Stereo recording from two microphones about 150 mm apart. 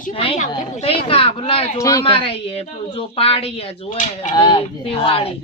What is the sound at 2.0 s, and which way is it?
A woman's voice, 35° left (ahead or behind).